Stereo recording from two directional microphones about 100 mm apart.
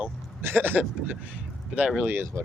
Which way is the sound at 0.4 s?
20° right (ahead or behind).